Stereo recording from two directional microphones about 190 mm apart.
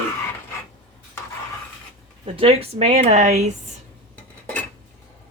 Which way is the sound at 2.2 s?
30° right (ahead or behind).